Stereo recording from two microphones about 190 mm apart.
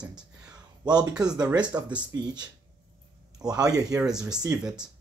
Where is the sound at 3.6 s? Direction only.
20° right (ahead or behind).